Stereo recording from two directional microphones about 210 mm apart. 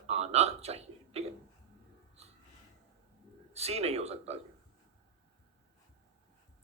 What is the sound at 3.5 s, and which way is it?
Speech, 30° right (ahead or behind).